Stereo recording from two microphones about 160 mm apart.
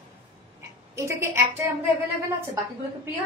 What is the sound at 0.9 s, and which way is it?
Speech, 15° right (ahead or behind).